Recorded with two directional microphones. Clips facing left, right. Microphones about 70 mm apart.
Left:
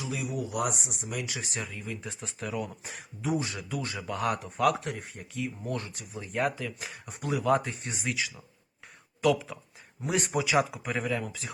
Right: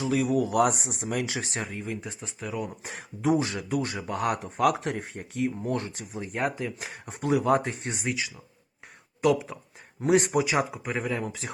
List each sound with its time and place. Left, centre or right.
0.0 s speech: right
1.3 s speech: right
2.0 s speech: centre
2.8 s speech: right
9.2 s speech: right
10.8 s speech: centre
11.1 s speech: right